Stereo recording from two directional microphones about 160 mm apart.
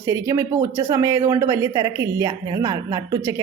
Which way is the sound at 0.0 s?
15° right (ahead or behind).